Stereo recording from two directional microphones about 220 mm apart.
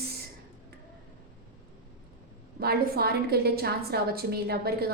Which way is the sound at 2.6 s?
45° right (ahead or behind).